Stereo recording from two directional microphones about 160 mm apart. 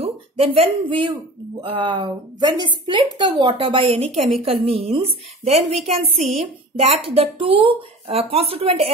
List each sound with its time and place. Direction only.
0.0 s speech: 35° right (ahead or behind)